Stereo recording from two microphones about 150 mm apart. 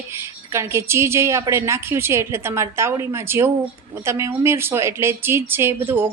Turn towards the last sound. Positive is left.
turn(degrees=-15)  # may be behind; listen again after turning